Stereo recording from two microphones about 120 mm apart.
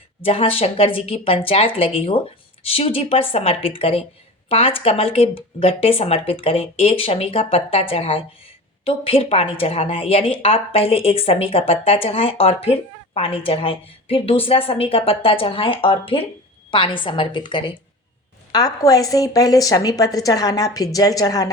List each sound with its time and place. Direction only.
0.3 s a woman's voice: 50° left (ahead or behind)
18.5 s a woman's voice: 30° left (ahead or behind)